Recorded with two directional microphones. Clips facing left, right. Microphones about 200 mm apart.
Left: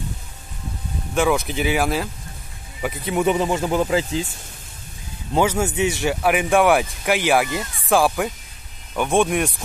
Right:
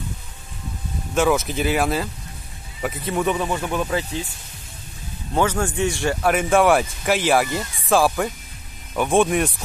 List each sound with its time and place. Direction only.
1.1 s speech: centre (ahead or behind)
3.2 s speech: 20° left (ahead or behind)
5.3 s speech: 10° left (ahead or behind)